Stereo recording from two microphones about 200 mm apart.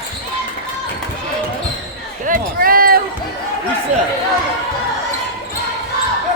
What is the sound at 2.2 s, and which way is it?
Run, 45° right (ahead or behind).